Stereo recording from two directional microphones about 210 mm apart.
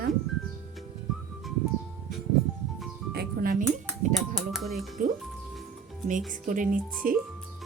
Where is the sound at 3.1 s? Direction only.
45° right (ahead or behind).